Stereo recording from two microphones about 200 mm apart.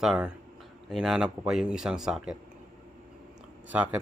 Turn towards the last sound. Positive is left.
turn(degrees=-10)  # may be behind; listen again after turning